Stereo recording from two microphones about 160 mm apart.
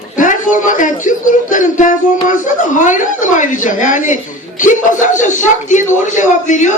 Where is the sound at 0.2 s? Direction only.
55° left (ahead or behind).